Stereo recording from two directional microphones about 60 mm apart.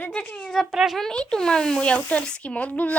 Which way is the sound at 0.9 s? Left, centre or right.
Centre.